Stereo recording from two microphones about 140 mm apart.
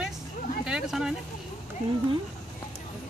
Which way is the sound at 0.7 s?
5° right (ahead or behind).